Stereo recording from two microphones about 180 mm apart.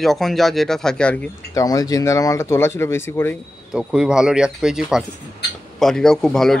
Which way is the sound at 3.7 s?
5° right (ahead or behind).